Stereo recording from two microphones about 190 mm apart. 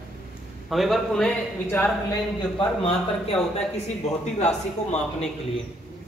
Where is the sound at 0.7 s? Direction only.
Centre (ahead or behind).